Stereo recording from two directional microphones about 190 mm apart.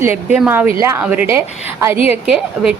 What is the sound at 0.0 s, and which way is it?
A woman's voice, 10° right (ahead or behind).